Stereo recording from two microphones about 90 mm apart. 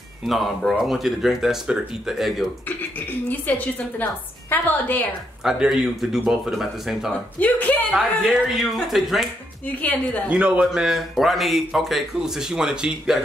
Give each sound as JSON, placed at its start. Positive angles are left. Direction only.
{"t": 0.2, "sound": "speech", "side_deg": 0}
{"t": 3.3, "sound": "a woman's voice", "side_deg": 20}
{"t": 5.4, "sound": "speech", "side_deg": -5}
{"t": 7.3, "sound": "speech", "side_deg": 20}
{"t": 7.9, "sound": "speech", "side_deg": -5}
{"t": 9.8, "sound": "a woman's voice", "side_deg": 15}
{"t": 10.3, "sound": "speech", "side_deg": -10}